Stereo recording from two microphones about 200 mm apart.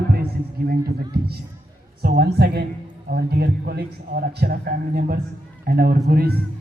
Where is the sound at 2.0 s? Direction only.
50° right (ahead or behind).